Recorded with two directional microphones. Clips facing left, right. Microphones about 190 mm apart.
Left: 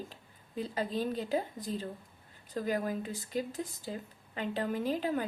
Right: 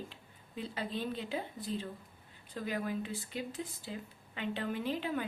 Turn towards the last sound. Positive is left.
turn(degrees=40)  # may be behind; listen again after turning